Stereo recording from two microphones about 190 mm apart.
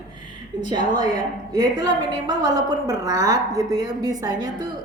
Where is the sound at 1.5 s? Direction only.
20° right (ahead or behind).